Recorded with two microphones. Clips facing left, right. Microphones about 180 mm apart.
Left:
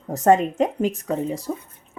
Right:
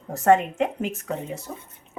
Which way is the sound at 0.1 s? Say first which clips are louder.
Left 2 dB; 40° left (ahead or behind).